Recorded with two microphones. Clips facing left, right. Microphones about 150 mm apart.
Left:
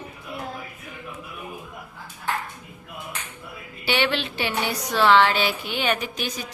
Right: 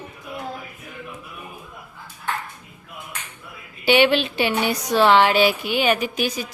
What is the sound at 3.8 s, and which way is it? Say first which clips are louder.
A woman's voice: right 7 dB; 15° right (ahead or behind).